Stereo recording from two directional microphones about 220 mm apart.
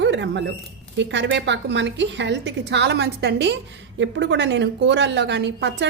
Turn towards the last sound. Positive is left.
turn(degrees=-50)  # may be behind; listen again after turning